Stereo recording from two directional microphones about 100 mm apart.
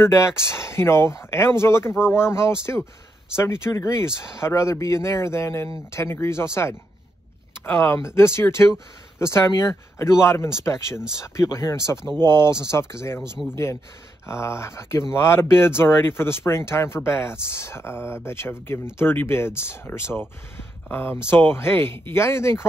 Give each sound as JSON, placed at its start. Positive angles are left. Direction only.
{"t": 0.0, "sound": "speech", "side_deg": 25}